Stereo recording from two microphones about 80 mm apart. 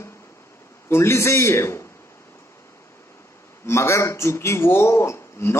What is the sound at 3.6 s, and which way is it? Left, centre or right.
A man's voice, left.